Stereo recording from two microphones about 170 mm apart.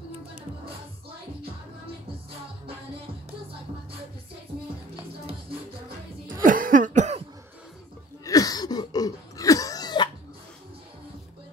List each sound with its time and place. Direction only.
6.4 s cough: 50° right (ahead or behind)
8.3 s cough: 20° left (ahead or behind)